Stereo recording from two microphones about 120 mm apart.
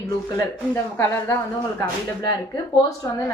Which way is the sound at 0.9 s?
20° left (ahead or behind).